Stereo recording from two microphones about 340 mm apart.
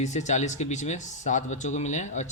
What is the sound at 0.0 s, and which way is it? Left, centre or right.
Speech, left.